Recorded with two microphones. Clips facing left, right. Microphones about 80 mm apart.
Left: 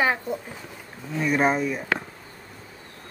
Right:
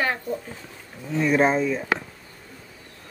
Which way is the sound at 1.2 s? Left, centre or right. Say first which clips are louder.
Right 2 dB; centre.